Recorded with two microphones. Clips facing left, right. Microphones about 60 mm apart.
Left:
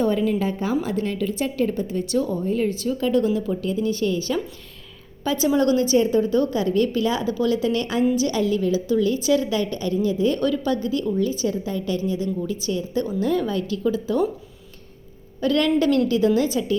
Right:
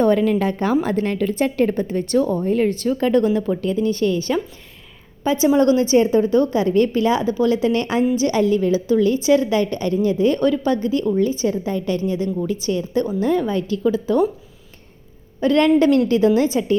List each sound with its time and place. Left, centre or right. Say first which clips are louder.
0.0 s a woman's voice: right 5 dB; right
0.8 s a woman's voice: right 4 dB; right
5.2 s a woman's voice: right 4 dB; right
13.1 s a woman's voice: right 1 dB; right
15.4 s a woman's voice: right 5 dB; right